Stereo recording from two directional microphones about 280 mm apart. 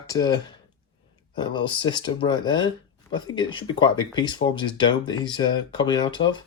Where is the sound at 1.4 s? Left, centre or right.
Centre.